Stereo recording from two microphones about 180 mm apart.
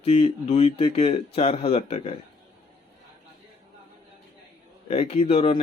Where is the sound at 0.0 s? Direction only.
35° left (ahead or behind).